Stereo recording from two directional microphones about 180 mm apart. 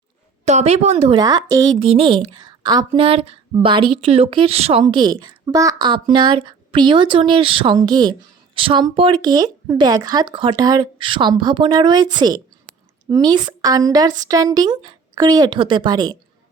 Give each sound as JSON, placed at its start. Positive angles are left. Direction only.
{"t": 0.4, "sound": "a woman's voice", "side_deg": -35}
{"t": 1.8, "sound": "a woman's voice", "side_deg": -30}